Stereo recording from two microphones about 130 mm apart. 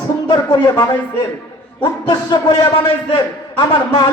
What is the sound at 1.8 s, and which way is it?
A man's voice, 30° left (ahead or behind).